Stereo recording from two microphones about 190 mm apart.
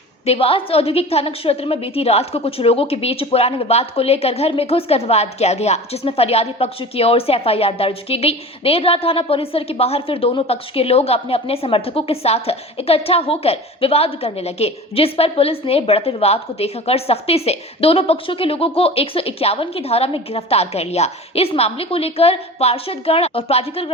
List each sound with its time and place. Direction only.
0.3 s a woman's voice: 30° left (ahead or behind)